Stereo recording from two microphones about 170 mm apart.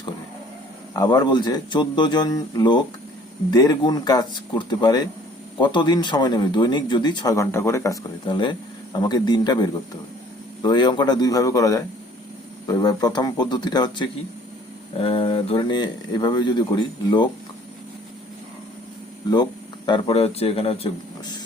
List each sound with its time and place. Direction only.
0.9 s speech: 25° left (ahead or behind)
8.2 s speech: 25° left (ahead or behind)
19.3 s speech: 25° left (ahead or behind)